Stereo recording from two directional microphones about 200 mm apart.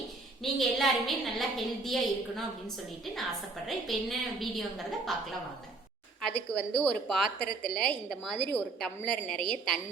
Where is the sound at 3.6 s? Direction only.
Centre (ahead or behind).